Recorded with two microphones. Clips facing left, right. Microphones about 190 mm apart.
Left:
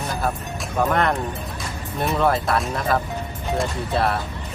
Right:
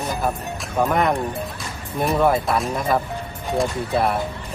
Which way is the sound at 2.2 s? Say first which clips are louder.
Right 1 dB; 5° right (ahead or behind).